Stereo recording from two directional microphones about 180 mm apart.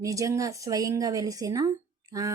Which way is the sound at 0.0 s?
20° right (ahead or behind).